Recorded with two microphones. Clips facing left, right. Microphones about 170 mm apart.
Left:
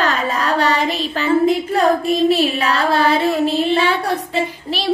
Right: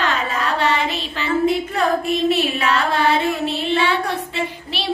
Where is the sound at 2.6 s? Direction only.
35° left (ahead or behind).